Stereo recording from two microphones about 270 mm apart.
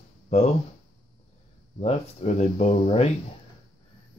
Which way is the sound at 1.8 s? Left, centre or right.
Left.